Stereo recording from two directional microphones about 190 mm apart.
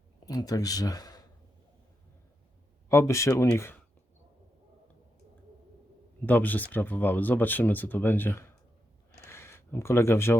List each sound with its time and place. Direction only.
0.3 s speech: 20° left (ahead or behind)
2.9 s speech: 15° left (ahead or behind)
6.2 s speech: 10° left (ahead or behind)
9.2 s a sound: 15° left (ahead or behind)